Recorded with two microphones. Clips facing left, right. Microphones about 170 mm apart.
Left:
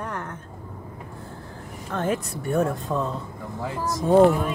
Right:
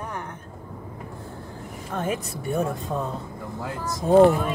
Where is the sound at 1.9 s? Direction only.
15° right (ahead or behind).